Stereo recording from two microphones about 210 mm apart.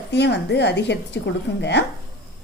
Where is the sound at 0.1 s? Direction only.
55° left (ahead or behind).